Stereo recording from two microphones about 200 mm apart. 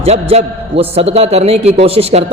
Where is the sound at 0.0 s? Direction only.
30° right (ahead or behind).